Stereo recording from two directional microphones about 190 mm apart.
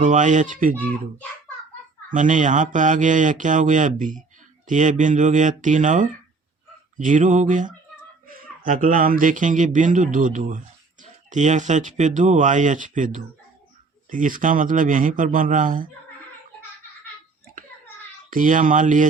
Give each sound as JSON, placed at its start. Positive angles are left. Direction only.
{"t": 0.0, "sound": "speech", "side_deg": -40}
{"t": 2.0, "sound": "speech", "side_deg": -45}
{"t": 18.3, "sound": "speech", "side_deg": -45}